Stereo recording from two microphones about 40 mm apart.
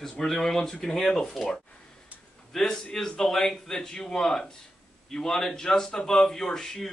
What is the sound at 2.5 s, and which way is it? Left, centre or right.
Speech, centre.